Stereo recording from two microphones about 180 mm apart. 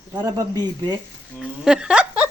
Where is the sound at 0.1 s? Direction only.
20° right (ahead or behind).